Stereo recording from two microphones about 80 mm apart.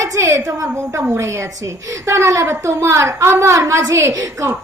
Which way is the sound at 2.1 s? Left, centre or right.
Right.